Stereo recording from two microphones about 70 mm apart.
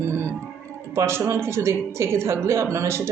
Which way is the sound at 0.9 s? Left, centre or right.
Right.